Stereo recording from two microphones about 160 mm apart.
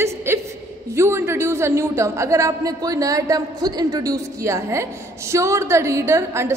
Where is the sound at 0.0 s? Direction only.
15° right (ahead or behind).